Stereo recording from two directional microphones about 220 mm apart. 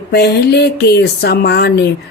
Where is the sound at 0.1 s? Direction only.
45° left (ahead or behind).